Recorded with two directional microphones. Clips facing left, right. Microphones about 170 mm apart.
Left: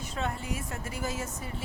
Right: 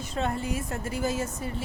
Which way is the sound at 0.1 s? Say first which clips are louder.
Right 5 dB; 35° right (ahead or behind).